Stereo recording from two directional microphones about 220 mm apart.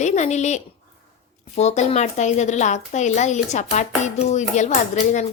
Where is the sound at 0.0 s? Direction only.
30° left (ahead or behind).